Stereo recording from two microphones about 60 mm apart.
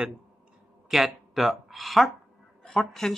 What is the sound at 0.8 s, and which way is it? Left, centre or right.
Speech, centre.